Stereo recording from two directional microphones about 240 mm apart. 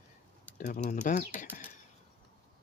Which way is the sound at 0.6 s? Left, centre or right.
Left.